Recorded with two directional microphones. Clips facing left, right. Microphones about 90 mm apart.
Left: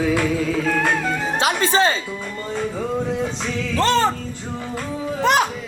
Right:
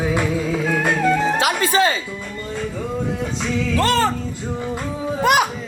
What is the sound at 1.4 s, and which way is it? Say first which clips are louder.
Music: even; 25° left (ahead or behind).